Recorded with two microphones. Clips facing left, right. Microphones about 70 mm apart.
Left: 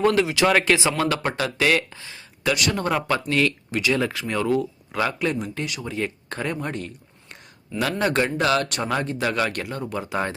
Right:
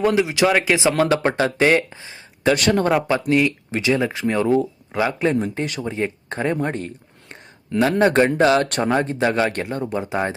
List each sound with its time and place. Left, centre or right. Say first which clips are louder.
0.0 s speech: right 2 dB; centre
0.8 s speech: right 5 dB; right
2.5 s speech: right 6 dB; right
2.9 s speech: right 5 dB; centre
5.5 s speech: right 4 dB; right
5.8 s speech: right 4 dB; right